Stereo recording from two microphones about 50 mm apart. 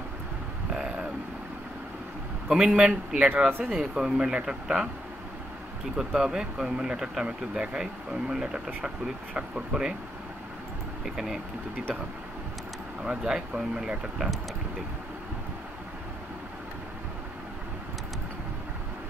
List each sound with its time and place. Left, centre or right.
0.7 s vehicle: centre
2.5 s speech: centre
3.4 s speech: right
3.7 s speech: centre
5.9 s speech: centre
11.1 s speech: centre
13.0 s speech: centre